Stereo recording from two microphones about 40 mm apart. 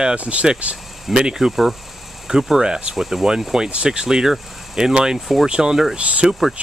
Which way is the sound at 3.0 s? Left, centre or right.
Centre.